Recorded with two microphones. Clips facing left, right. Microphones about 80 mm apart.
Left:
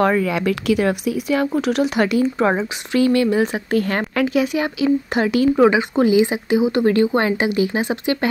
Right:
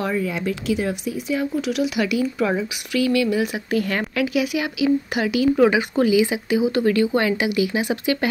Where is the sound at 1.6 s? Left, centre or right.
Left.